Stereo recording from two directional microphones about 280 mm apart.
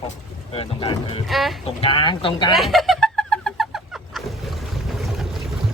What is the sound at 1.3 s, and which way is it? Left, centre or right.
Speech, centre.